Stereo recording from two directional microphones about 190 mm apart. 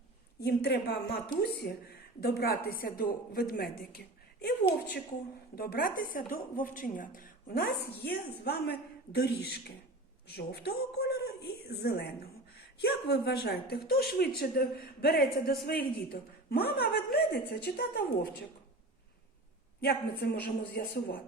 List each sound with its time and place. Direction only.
0.3 s a woman's voice: 60° left (ahead or behind)
2.2 s a woman's voice: 55° left (ahead or behind)
19.8 s a woman's voice: 60° left (ahead or behind)